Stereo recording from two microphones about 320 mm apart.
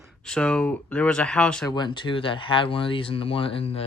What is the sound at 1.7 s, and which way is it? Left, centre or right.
Speech, centre.